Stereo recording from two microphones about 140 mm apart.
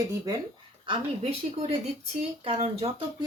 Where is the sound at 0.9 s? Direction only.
45° right (ahead or behind).